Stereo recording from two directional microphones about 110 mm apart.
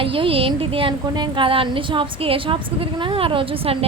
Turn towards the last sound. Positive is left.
turn(degrees=-55)  # may be behind; listen again after turning